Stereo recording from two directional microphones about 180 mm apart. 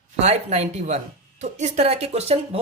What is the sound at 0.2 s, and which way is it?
Speech, 35° right (ahead or behind).